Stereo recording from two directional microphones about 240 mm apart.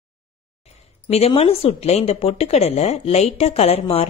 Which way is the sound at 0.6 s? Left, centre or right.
Left.